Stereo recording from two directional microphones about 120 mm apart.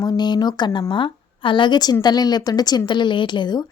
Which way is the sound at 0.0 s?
35° left (ahead or behind).